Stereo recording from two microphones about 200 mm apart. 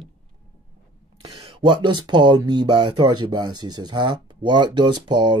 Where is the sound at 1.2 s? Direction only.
25° right (ahead or behind).